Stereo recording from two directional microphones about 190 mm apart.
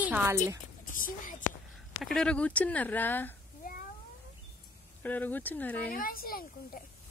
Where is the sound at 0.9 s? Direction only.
45° left (ahead or behind).